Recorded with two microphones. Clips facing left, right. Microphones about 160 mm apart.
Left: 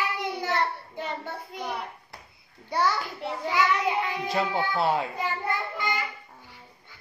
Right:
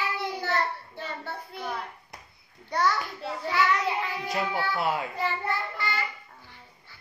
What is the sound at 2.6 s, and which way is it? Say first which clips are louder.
Child singing: even; 10° left (ahead or behind).